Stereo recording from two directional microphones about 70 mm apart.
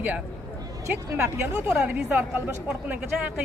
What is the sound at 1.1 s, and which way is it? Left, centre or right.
Speech, right.